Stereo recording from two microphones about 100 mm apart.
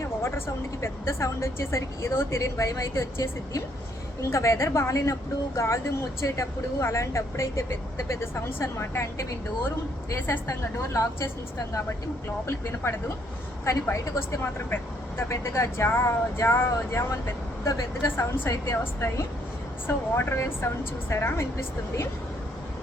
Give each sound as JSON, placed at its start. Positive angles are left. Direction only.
{"t": 0.2, "sound": "a woman's voice", "side_deg": 25}
{"t": 12.5, "sound": "a woman's voice", "side_deg": 25}